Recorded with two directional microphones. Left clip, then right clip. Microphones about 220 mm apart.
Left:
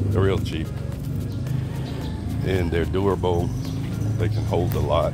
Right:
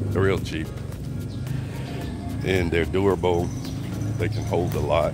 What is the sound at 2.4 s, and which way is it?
Speech, 20° right (ahead or behind).